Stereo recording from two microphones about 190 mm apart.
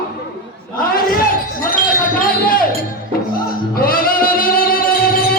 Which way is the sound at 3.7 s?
50° left (ahead or behind).